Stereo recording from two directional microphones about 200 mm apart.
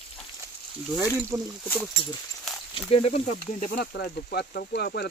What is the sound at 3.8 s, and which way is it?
Speech, 50° left (ahead or behind).